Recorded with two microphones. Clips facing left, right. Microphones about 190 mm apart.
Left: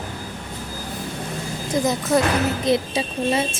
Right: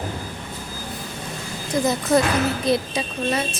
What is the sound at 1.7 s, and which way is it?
A woman's voice, 20° left (ahead or behind).